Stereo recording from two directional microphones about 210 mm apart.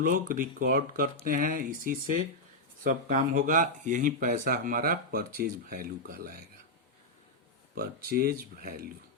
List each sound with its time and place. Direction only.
0.0 s speech: 40° right (ahead or behind)
7.8 s speech: 45° right (ahead or behind)